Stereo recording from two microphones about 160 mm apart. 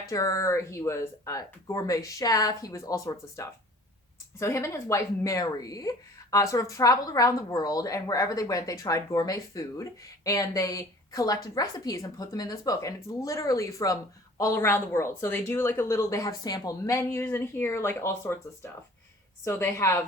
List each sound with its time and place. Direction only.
0.1 s a woman's voice: 20° left (ahead or behind)